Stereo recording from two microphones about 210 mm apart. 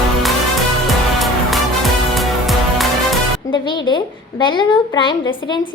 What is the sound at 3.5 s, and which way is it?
A woman's voice, 20° left (ahead or behind).